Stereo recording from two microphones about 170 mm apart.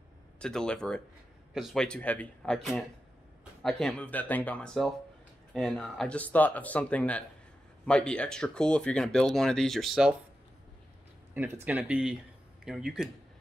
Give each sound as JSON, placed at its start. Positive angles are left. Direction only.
{"t": 0.4, "sound": "speech", "side_deg": 5}
{"t": 11.3, "sound": "speech", "side_deg": -10}